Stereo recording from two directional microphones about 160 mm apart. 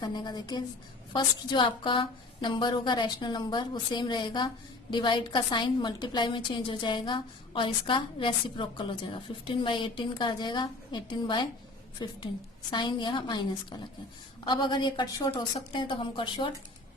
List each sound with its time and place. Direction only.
0.0 s a woman's voice: 25° left (ahead or behind)